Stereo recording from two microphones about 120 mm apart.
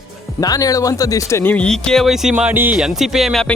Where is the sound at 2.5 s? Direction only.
15° right (ahead or behind).